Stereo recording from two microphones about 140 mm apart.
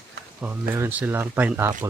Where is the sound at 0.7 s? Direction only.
15° right (ahead or behind).